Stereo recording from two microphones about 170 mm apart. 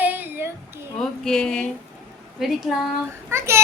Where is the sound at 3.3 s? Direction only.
15° right (ahead or behind).